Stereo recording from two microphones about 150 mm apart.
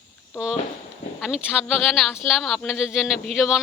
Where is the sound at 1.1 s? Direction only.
5° right (ahead or behind).